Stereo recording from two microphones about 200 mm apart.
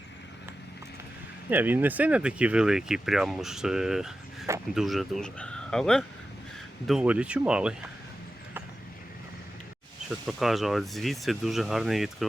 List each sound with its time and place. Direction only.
1.5 s speech: 10° right (ahead or behind)
10.1 s speech: centre (ahead or behind)